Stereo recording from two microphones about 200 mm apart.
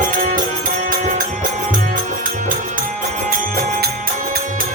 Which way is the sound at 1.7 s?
40° right (ahead or behind).